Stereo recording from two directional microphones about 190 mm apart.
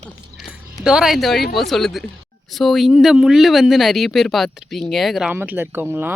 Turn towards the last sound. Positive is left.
turn(degrees=-10)  # may be behind; listen again after turning